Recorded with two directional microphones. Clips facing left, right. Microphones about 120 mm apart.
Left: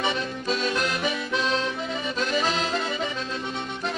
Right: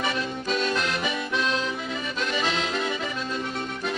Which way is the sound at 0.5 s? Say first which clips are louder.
Left 1 dB; centre (ahead or behind).